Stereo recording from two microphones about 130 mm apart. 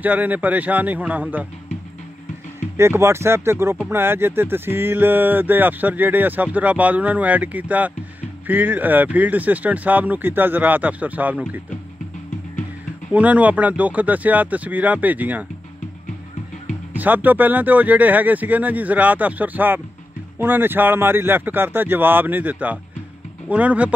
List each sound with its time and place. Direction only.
0.0 s speech: 10° right (ahead or behind)
2.8 s speech: 20° right (ahead or behind)
13.1 s speech: 10° right (ahead or behind)
16.9 s speech: 15° right (ahead or behind)